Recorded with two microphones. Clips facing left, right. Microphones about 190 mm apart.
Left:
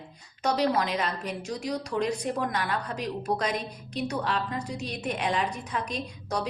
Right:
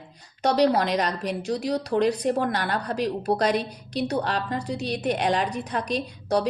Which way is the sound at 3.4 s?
70° right (ahead or behind).